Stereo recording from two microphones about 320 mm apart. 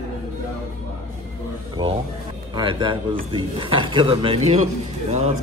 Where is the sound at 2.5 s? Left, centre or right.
Centre.